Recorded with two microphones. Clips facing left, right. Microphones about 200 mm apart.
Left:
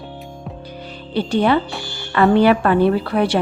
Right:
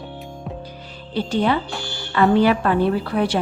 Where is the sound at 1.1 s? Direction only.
65° left (ahead or behind).